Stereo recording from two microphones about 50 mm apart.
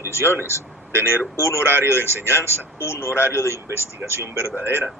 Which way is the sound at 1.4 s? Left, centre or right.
Left.